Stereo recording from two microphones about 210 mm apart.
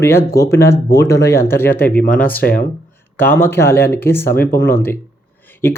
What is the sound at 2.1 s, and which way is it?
Speech, 40° left (ahead or behind).